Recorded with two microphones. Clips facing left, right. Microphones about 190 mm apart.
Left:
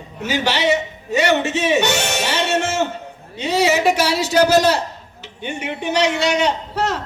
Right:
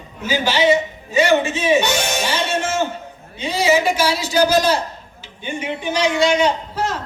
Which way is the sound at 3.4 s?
65° left (ahead or behind).